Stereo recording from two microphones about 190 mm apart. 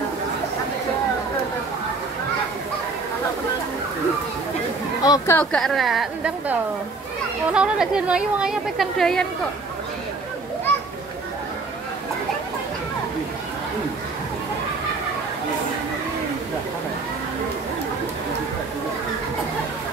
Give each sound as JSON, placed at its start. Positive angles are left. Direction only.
{"t": 5.0, "sound": "a woman's voice", "side_deg": 15}
{"t": 7.5, "sound": "a woman's voice", "side_deg": -5}